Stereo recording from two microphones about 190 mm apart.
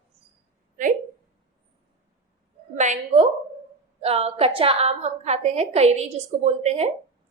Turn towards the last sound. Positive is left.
turn(degrees=-35)  # may be behind; listen again after turning